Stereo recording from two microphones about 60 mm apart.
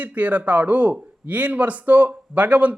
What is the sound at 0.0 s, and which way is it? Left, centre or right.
Speech, right.